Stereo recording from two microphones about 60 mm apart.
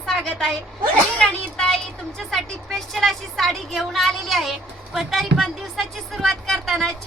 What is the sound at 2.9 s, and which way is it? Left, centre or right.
A woman's voice, centre.